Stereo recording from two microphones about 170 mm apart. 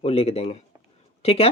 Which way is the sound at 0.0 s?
35° left (ahead or behind).